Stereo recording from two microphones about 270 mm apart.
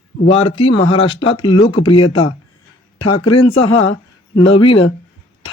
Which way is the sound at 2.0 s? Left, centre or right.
Left.